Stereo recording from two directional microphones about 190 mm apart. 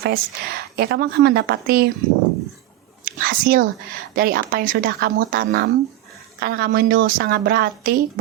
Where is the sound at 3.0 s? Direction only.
50° right (ahead or behind).